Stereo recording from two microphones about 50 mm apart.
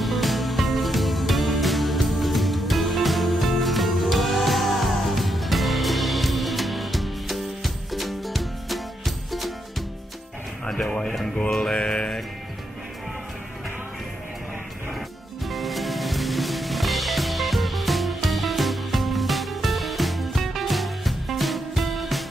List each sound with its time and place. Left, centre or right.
0.0 s music: centre
10.6 s a sound: centre
11.7 s music: left
15.4 s music: centre